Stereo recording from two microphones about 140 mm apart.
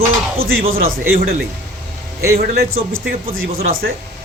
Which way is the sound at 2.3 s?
90° right.